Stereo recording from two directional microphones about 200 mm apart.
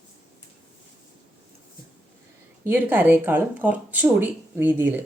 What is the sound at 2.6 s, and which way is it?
Speech, 10° right (ahead or behind).